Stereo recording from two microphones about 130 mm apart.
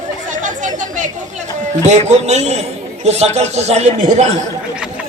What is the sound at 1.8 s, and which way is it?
A man's voice, 60° right (ahead or behind).